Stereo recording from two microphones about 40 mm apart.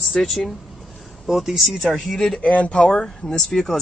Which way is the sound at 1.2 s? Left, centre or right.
Centre.